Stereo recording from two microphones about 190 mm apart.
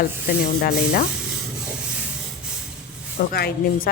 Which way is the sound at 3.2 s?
50° left (ahead or behind).